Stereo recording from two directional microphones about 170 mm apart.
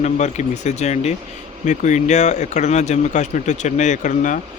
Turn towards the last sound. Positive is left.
turn(degrees=50)  # may be behind; listen again after turning